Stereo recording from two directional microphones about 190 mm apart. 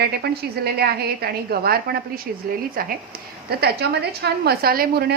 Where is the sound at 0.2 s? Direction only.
55° right (ahead or behind).